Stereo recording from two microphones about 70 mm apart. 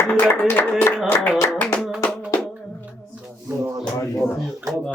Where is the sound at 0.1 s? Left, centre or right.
Left.